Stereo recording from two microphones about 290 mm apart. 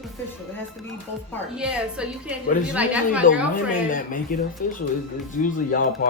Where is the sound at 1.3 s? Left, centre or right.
Centre.